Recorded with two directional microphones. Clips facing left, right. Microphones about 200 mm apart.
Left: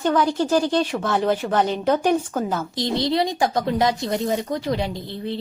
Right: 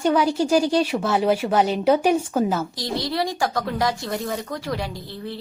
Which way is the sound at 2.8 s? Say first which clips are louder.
Left 4 dB; 20° left (ahead or behind).